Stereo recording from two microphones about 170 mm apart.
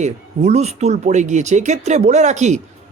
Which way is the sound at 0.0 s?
40° right (ahead or behind).